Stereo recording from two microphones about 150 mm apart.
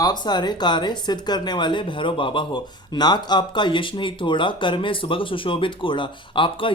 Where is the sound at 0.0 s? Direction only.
30° left (ahead or behind).